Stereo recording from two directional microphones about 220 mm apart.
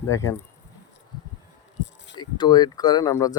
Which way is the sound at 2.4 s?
20° left (ahead or behind).